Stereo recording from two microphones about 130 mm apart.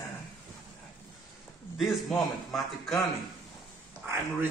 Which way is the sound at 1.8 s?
Centre (ahead or behind).